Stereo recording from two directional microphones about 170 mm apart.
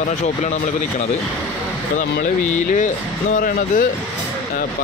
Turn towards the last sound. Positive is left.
turn(degrees=55)  # may be behind; listen again after turning